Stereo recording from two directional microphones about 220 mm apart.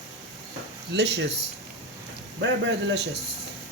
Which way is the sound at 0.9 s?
50° right (ahead or behind).